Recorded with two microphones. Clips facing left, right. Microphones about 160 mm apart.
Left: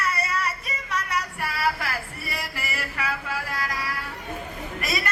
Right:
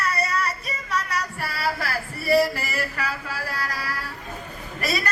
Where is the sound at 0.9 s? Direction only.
35° right (ahead or behind).